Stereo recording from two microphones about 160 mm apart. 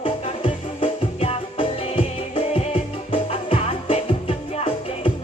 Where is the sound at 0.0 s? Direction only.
35° left (ahead or behind).